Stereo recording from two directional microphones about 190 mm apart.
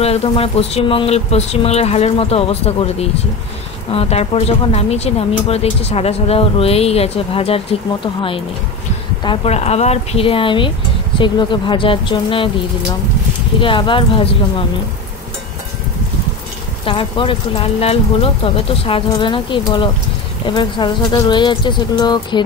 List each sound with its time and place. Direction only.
0.0 s speech: 30° left (ahead or behind)
13.6 s speech: 25° left (ahead or behind)
16.8 s speech: 25° left (ahead or behind)